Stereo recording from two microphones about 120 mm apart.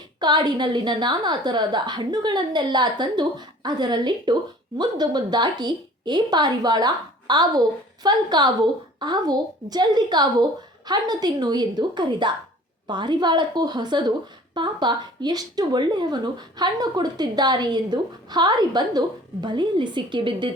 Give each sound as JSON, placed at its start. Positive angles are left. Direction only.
{"t": 0.2, "sound": "speech", "side_deg": -35}